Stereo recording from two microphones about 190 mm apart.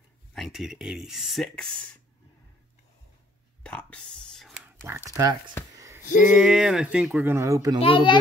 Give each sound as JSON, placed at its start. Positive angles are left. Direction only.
{"t": 0.3, "sound": "speech", "side_deg": 0}
{"t": 3.6, "sound": "whispering", "side_deg": 5}
{"t": 5.1, "sound": "speech", "side_deg": -20}
{"t": 5.8, "sound": "a sound", "side_deg": -15}
{"t": 6.2, "sound": "speech", "side_deg": -5}
{"t": 7.8, "sound": "a child's voice", "side_deg": 25}